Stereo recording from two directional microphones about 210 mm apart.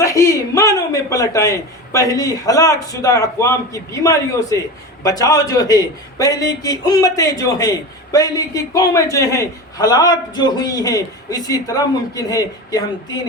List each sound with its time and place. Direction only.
0.0 s a man's voice: 15° left (ahead or behind)